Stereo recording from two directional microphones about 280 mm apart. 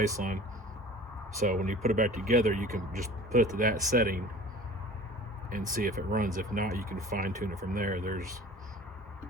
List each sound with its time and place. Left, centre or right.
0.2 s speech: right
1.5 s speech: right
5.5 s speech: right